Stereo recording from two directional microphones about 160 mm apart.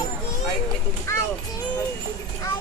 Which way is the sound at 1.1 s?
15° left (ahead or behind).